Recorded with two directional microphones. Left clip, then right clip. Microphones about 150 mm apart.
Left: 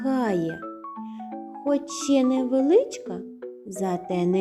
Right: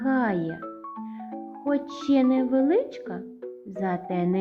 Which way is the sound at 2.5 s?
45° left (ahead or behind).